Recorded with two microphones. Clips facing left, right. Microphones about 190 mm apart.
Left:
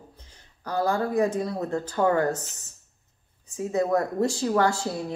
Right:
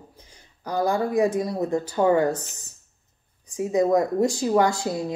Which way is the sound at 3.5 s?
15° right (ahead or behind).